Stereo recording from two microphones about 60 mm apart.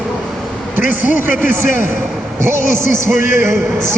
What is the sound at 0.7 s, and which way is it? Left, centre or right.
A man's voice, right.